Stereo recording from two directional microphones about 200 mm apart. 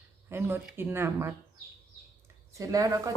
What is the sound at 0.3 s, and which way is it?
Speech, 10° right (ahead or behind).